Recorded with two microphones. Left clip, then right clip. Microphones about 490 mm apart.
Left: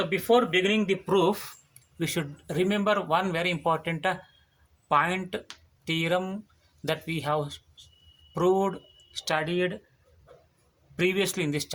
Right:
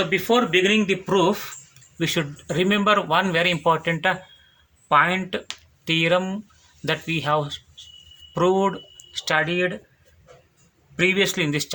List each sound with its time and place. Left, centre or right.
0.0 s a man's voice: left
10.9 s a man's voice: left